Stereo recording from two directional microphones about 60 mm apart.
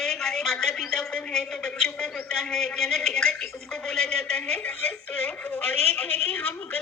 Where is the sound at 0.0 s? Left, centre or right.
Centre.